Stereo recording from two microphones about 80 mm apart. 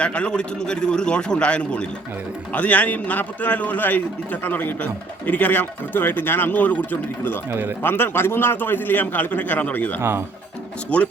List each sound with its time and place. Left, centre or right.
0.0 s a man's voice: centre
10.0 s speech: right
10.8 s a man's voice: centre